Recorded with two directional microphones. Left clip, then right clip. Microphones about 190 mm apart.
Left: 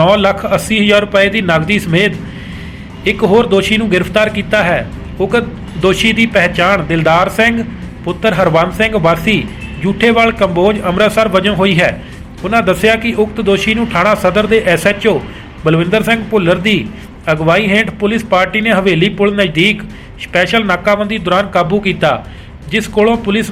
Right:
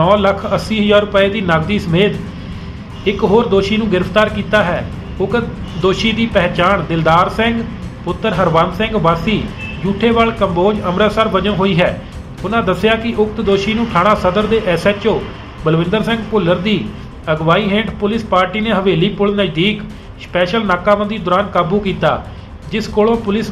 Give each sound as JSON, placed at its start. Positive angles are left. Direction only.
{"t": 0.0, "sound": "speech", "side_deg": 15}